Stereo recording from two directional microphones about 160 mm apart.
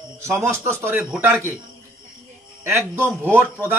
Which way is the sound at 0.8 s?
10° right (ahead or behind).